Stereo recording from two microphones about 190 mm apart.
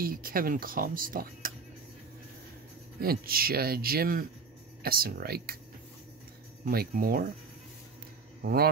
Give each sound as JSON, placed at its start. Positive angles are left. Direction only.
{"t": 0.0, "sound": "speech", "side_deg": -50}
{"t": 3.0, "sound": "speech", "side_deg": -50}
{"t": 6.6, "sound": "speech", "side_deg": -50}